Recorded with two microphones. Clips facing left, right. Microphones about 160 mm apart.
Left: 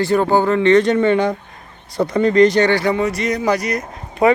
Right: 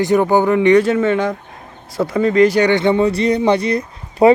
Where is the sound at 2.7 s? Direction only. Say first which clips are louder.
Right 3 dB; 25° right (ahead or behind).